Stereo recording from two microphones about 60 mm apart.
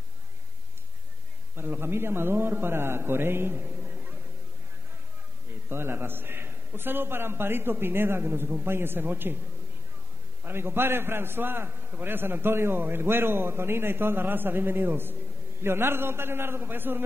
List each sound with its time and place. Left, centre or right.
1.5 s a man's voice: right
5.7 s a man's voice: right
10.4 s a man's voice: right